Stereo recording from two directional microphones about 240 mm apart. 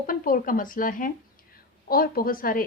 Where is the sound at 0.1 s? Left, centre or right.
Left.